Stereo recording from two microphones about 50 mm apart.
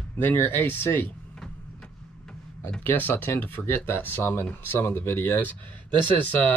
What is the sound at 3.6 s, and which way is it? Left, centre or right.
Speech, left.